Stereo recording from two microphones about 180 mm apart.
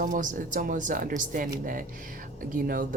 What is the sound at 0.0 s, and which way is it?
Speech, 45° right (ahead or behind).